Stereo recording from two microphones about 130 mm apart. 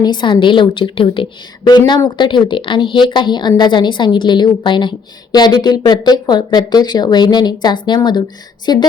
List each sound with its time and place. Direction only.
0.0 s a woman's voice: 35° left (ahead or behind)